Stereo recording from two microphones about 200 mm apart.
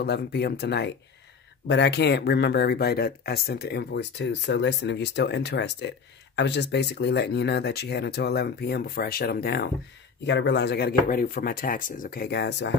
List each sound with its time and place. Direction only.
0.0 s speech: 55° left (ahead or behind)